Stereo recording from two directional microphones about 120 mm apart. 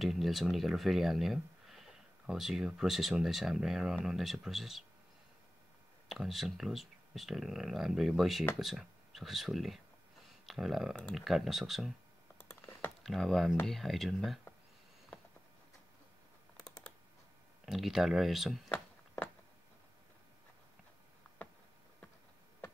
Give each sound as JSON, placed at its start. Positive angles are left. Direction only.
{"t": 0.0, "sound": "speech", "side_deg": 0}
{"t": 6.0, "sound": "speech", "side_deg": 0}
{"t": 12.4, "sound": "typing", "side_deg": 15}
{"t": 13.0, "sound": "speech", "side_deg": 0}
{"t": 17.6, "sound": "speech", "side_deg": 0}
{"t": 18.7, "sound": "a sound", "side_deg": 15}